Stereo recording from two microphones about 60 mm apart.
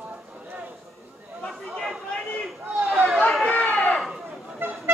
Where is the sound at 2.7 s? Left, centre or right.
Right.